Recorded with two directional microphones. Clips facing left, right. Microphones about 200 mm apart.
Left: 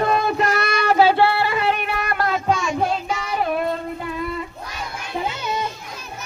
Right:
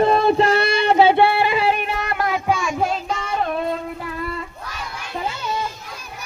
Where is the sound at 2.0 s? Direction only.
15° right (ahead or behind).